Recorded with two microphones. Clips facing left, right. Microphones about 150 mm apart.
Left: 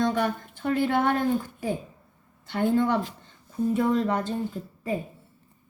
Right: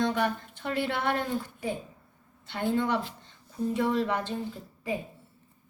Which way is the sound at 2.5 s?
50° left (ahead or behind).